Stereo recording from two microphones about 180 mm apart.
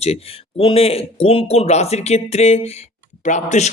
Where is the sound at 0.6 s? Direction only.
35° left (ahead or behind).